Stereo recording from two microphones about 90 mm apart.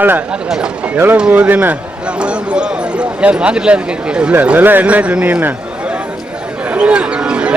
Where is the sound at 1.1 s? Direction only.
15° right (ahead or behind).